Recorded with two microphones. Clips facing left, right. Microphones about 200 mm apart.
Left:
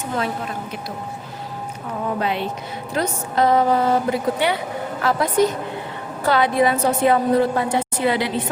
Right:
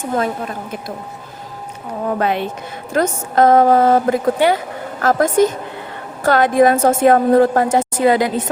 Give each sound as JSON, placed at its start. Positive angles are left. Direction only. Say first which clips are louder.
{"t": 0.0, "sound": "a woman's voice", "louder": "right 5 dB", "side_deg": -45}
{"t": 2.1, "sound": "a woman's voice", "louder": "right 6 dB", "side_deg": -50}